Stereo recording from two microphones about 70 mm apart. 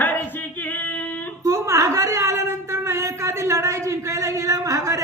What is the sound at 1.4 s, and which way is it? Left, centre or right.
A man's voice, right.